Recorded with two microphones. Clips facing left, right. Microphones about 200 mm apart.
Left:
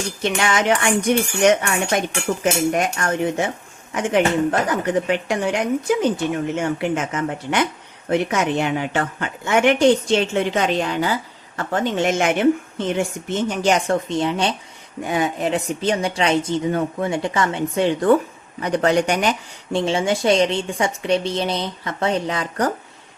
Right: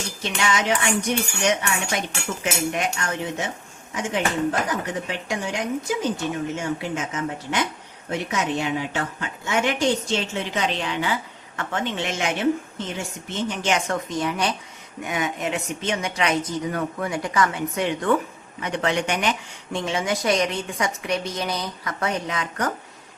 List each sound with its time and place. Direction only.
0.2 s a woman's voice: 55° left (ahead or behind)
2.4 s cutlery: 45° left (ahead or behind)
3.9 s a woman's voice: 60° left (ahead or behind)
12.9 s cutlery: 55° left (ahead or behind)
13.6 s speech: 35° left (ahead or behind)